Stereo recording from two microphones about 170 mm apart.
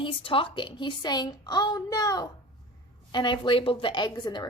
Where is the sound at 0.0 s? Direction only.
30° left (ahead or behind).